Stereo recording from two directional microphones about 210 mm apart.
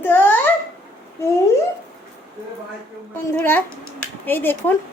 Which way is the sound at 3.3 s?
10° left (ahead or behind).